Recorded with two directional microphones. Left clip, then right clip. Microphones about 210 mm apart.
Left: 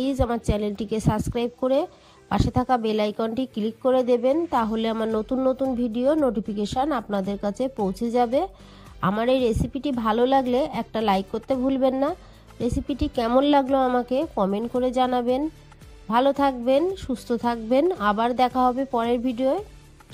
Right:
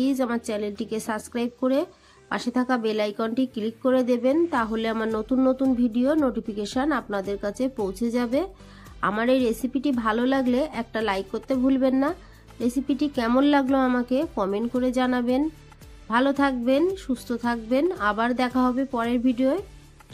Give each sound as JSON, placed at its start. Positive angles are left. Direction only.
{"t": 0.0, "sound": "a woman's voice", "side_deg": 40}